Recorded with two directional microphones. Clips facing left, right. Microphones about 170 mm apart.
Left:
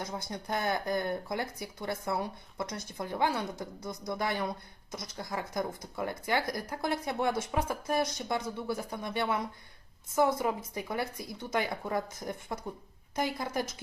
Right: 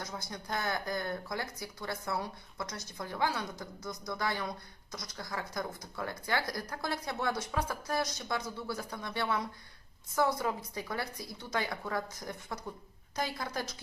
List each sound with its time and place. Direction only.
0.3 s a woman's voice: 25° left (ahead or behind)